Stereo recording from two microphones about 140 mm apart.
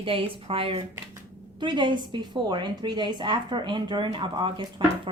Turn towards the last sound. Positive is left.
turn(degrees=-35)  # may be behind; listen again after turning